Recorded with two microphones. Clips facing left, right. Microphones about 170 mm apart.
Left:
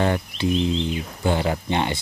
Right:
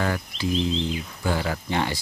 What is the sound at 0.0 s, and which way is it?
Speech, 25° left (ahead or behind).